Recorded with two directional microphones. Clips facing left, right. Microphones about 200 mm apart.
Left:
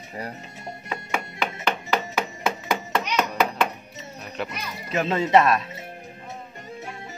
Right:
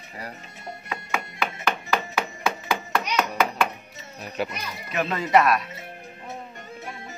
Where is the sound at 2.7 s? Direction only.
20° left (ahead or behind).